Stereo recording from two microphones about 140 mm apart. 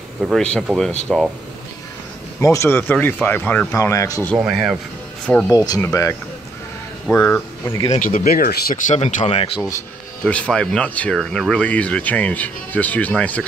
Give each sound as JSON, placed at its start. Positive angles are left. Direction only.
{"t": 0.2, "sound": "speech", "side_deg": 5}
{"t": 2.4, "sound": "speech", "side_deg": 20}
{"t": 4.4, "sound": "speech", "side_deg": 0}
{"t": 5.5, "sound": "speech", "side_deg": 25}
{"t": 8.0, "sound": "speech", "side_deg": 85}
{"t": 9.6, "sound": "speech", "side_deg": 20}
{"t": 10.2, "sound": "speech", "side_deg": 10}